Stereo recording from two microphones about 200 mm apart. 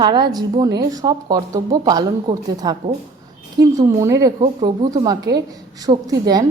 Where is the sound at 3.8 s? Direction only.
15° right (ahead or behind).